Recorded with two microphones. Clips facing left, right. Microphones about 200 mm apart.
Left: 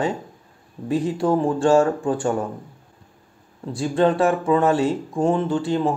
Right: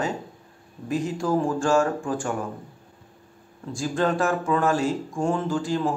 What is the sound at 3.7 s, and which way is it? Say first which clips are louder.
Speech: left 5 dB; 30° left (ahead or behind).